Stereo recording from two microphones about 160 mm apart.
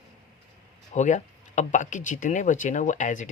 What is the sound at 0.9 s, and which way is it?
Speech, 50° left (ahead or behind).